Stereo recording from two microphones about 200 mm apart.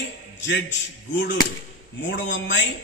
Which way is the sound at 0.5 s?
65° left (ahead or behind).